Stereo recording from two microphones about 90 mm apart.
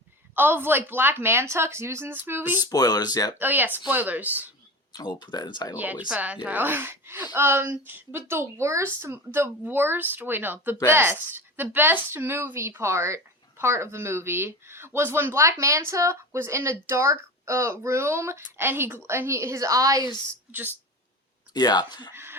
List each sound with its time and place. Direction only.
0.3 s speech: 25° right (ahead or behind)
2.6 s speech: 45° left (ahead or behind)
3.3 s speech: 20° right (ahead or behind)
4.9 s speech: 50° left (ahead or behind)
5.7 s speech: 20° right (ahead or behind); by 20.0 s 40° right (ahead or behind)
20.5 s speech: 20° right (ahead or behind)
21.5 s speech: 50° left (ahead or behind)
22.1 s a sound: 25° right (ahead or behind)